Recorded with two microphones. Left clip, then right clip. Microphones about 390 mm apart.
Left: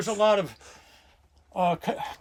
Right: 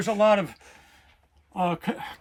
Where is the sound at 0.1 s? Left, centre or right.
Centre.